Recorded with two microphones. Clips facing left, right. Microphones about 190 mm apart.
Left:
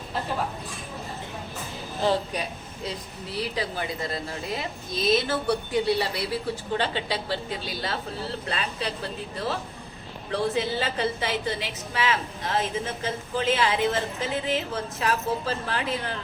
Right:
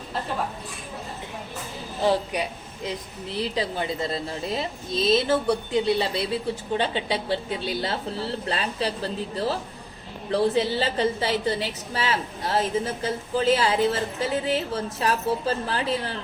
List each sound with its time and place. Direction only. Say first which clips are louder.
2.0 s a woman's voice: right 2 dB; 15° right (ahead or behind)
8.4 s a woman's voice: right 4 dB; 35° right (ahead or behind)